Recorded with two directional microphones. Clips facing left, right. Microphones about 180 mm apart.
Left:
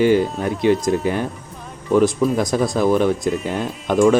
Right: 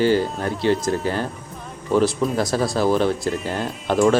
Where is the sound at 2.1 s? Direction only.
Centre (ahead or behind).